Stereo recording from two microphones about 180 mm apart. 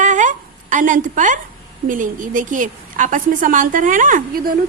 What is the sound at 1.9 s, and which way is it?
A woman's voice, 45° right (ahead or behind).